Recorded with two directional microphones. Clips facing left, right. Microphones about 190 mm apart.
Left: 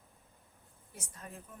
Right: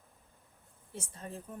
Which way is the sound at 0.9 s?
30° right (ahead or behind).